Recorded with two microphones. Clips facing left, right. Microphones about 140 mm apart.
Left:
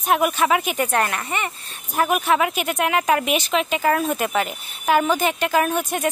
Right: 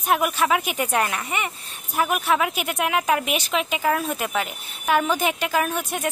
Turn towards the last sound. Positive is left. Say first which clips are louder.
# left 3 dB
turn(degrees=0)  # may be behind; listen again after turning